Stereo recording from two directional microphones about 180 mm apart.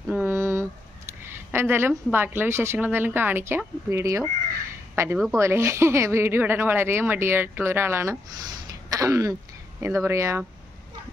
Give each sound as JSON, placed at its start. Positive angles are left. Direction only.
{"t": 0.1, "sound": "a woman's voice", "side_deg": -10}
{"t": 8.6, "sound": "a sound", "side_deg": -20}
{"t": 9.8, "sound": "speech", "side_deg": -15}